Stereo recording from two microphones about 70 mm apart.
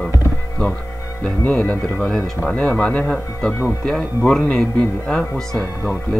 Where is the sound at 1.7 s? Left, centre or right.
Left.